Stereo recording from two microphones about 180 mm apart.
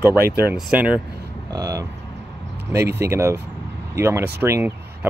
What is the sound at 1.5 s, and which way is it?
Speech, 20° right (ahead or behind).